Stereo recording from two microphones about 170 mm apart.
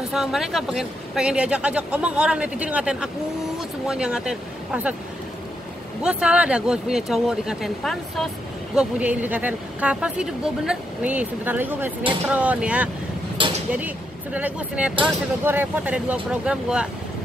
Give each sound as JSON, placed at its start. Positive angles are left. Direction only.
{"t": 0.1, "sound": "speech", "side_deg": 0}
{"t": 6.0, "sound": "speech", "side_deg": -5}
{"t": 13.4, "sound": "a sound", "side_deg": -30}
{"t": 13.7, "sound": "speech", "side_deg": -10}